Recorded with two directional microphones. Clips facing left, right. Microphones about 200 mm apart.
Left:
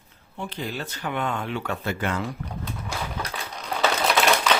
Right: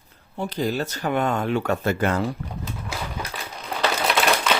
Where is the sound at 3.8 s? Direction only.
Centre (ahead or behind).